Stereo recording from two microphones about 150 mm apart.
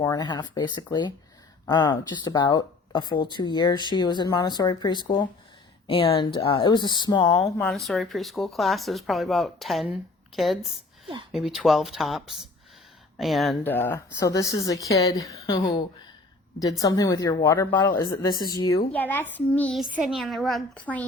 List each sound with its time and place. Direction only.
0.0 s speech: 25° left (ahead or behind)
7.7 s a woman's voice: centre (ahead or behind)
13.7 s speech: 15° left (ahead or behind)
18.9 s a child's voice: 10° left (ahead or behind)
19.8 s speech: 5° right (ahead or behind)